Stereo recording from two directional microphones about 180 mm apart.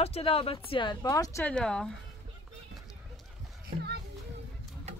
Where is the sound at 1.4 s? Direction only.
5° left (ahead or behind).